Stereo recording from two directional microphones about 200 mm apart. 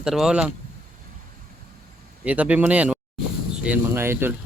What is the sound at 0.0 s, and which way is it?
Speech, centre (ahead or behind).